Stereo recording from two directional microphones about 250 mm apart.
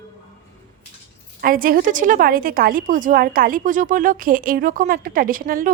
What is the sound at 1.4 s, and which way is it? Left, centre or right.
A woman's voice, right.